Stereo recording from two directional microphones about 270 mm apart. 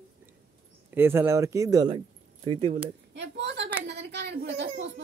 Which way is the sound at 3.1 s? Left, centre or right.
Right.